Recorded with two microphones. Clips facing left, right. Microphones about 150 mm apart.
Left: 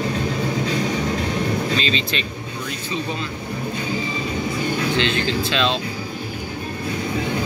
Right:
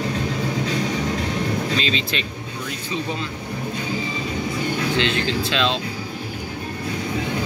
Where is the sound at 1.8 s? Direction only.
5° right (ahead or behind).